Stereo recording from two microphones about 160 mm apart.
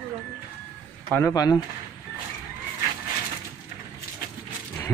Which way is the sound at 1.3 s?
25° left (ahead or behind).